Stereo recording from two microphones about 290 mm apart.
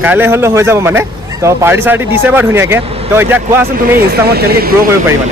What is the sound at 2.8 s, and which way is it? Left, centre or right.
Speech, centre.